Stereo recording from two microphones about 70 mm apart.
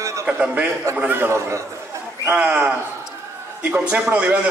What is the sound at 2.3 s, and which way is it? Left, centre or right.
A man's voice, centre.